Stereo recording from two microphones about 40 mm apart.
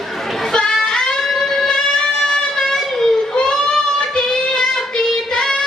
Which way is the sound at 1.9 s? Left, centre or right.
Centre.